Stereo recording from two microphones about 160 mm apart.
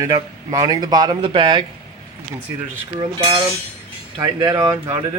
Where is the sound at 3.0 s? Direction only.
30° right (ahead or behind).